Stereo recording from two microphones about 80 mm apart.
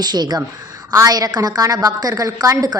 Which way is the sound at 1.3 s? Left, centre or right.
Right.